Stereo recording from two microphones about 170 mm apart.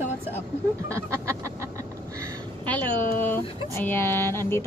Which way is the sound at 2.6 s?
10° left (ahead or behind).